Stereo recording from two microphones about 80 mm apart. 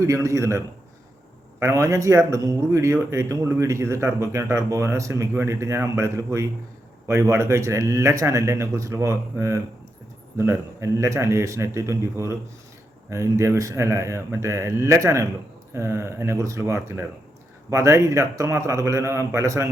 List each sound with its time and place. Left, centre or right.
0.0 s speech: right